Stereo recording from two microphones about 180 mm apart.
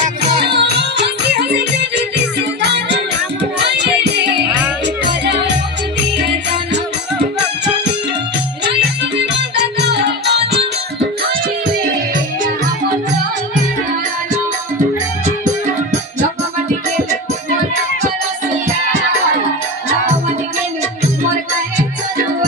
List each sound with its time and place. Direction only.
0.6 s music: 70° right (ahead or behind)
9.1 s music: 70° right (ahead or behind)